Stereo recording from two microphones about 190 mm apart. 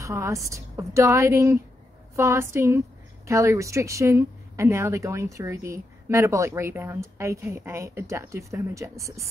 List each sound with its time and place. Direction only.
0.0 s a woman's voice: 15° right (ahead or behind)